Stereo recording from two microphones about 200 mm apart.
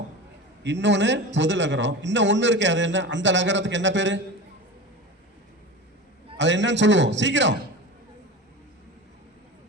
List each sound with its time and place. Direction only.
0.6 s a man's voice: 60° right (ahead or behind)
6.3 s a man's voice: 65° right (ahead or behind)